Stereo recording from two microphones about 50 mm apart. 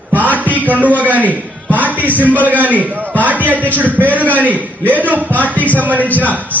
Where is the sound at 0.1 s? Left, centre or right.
Right.